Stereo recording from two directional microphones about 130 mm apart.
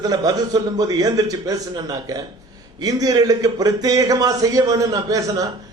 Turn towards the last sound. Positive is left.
turn(degrees=-25)  # may be behind; listen again after turning